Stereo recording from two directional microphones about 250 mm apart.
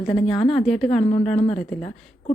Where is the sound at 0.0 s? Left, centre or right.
Centre.